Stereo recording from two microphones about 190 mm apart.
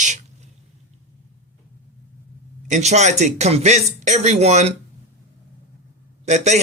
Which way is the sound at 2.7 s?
35° right (ahead or behind).